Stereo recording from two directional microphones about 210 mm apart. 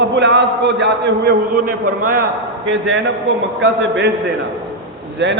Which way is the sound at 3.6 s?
55° right (ahead or behind).